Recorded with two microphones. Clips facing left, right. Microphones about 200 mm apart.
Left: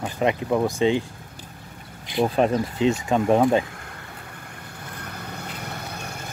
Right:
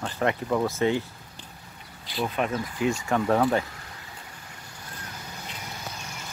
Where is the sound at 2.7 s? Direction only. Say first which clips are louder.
Left 4 dB; 20° left (ahead or behind).